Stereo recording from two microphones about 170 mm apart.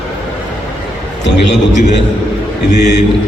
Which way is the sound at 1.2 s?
90° left.